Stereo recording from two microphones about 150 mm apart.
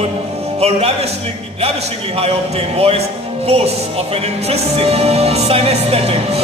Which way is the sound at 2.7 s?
40° right (ahead or behind).